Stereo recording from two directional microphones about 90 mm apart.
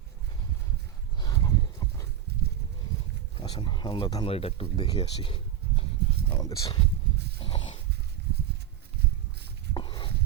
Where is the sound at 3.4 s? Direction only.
60° left (ahead or behind).